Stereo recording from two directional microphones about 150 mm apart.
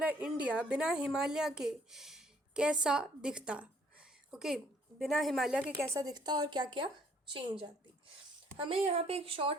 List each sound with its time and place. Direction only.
0.0 s a woman's voice: 5° right (ahead or behind)
5.8 s a woman's voice: 20° right (ahead or behind); by 9.6 s 35° right (ahead or behind)